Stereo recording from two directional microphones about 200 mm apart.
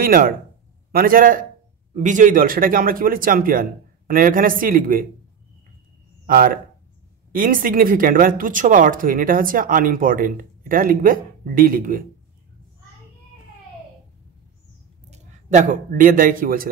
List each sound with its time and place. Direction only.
0.0 s speech: 45° right (ahead or behind)
6.2 s speech: 45° right (ahead or behind)
15.0 s a man's voice: 35° right (ahead or behind)